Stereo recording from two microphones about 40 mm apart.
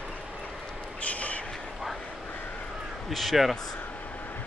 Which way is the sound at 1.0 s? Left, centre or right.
Left.